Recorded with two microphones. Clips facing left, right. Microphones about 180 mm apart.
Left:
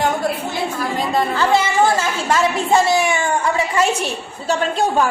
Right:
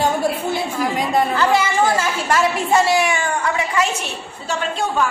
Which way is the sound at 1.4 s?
25° left (ahead or behind).